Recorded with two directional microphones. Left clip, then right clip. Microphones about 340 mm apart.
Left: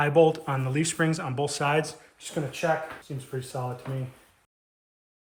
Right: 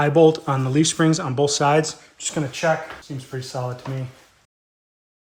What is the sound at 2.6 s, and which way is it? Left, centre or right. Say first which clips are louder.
Speech: right 6 dB; right.